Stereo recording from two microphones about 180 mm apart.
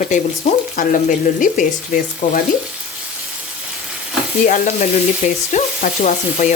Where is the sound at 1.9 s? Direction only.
45° left (ahead or behind).